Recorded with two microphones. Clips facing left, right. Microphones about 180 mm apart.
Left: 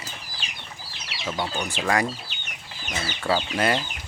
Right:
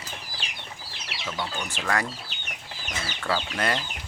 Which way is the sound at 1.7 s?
15° left (ahead or behind).